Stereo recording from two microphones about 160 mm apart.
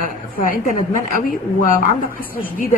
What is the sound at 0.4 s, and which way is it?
Speech, 60° left (ahead or behind).